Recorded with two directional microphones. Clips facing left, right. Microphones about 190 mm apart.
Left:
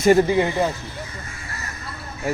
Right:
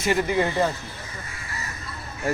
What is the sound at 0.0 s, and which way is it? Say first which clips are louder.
Speech: left 8 dB; 40° left (ahead or behind).